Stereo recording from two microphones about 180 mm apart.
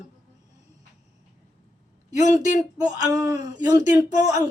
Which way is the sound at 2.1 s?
45° left (ahead or behind).